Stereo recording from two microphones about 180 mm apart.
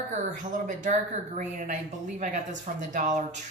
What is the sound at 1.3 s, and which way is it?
Speech, 45° right (ahead or behind).